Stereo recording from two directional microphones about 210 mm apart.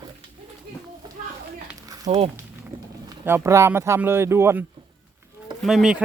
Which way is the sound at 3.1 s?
10° right (ahead or behind).